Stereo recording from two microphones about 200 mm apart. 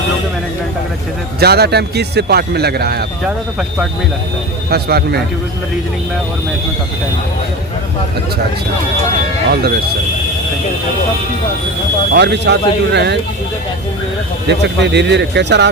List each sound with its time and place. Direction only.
1.4 s speech: 55° right (ahead or behind)
4.7 s speech: 50° right (ahead or behind)
9.5 s speech: 50° right (ahead or behind)
12.1 s speech: 60° right (ahead or behind)
14.4 s speech: 60° right (ahead or behind)